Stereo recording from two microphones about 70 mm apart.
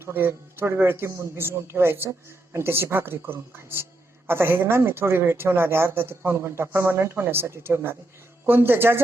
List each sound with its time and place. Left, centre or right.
0.0 s speech: right